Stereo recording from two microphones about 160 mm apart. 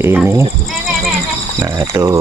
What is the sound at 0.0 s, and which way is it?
Speech, 15° right (ahead or behind).